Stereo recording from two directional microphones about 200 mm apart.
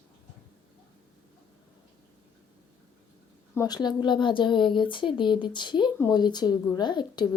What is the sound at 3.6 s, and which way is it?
A woman's voice, 20° left (ahead or behind).